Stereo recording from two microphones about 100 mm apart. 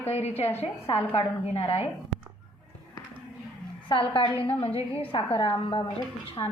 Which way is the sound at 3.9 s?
60° left (ahead or behind).